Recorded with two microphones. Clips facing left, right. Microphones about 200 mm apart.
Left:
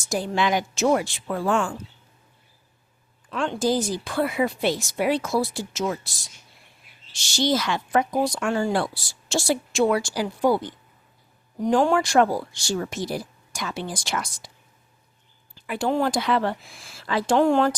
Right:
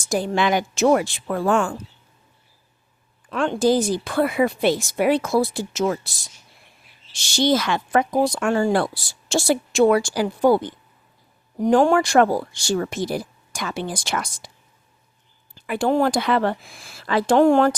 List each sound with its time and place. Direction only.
0.1 s a woman's voice: 55° right (ahead or behind)
3.2 s a woman's voice: 55° right (ahead or behind)
7.3 s a woman's voice: 60° right (ahead or behind)
11.6 s a woman's voice: 55° right (ahead or behind)
15.6 s a woman's voice: 55° right (ahead or behind)